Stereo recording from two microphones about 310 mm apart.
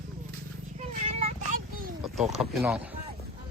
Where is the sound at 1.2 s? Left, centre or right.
Right.